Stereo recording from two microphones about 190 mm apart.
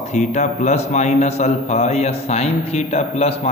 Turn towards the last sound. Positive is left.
turn(degrees=30)  # may be behind; listen again after turning